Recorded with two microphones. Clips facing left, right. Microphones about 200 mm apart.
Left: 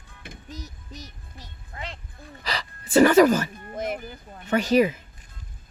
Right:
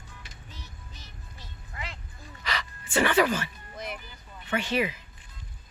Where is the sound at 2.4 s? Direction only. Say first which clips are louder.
Left 2 dB; 35° left (ahead or behind).